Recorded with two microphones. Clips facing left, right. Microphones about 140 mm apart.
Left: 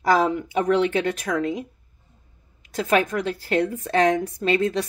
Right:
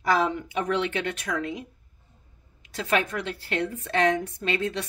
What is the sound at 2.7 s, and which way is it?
Speech, 40° left (ahead or behind).